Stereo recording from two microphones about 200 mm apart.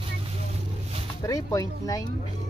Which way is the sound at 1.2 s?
15° left (ahead or behind).